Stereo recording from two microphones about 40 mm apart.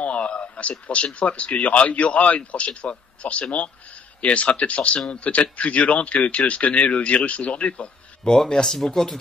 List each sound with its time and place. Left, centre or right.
0.0 s speech: left
8.3 s speech: centre